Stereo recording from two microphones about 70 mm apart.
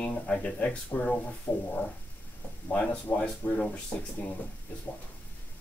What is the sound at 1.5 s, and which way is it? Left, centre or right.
Speech, left.